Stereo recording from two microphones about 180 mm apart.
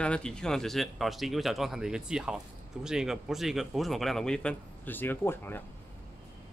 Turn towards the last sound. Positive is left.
turn(degrees=10)  # may be behind; listen again after turning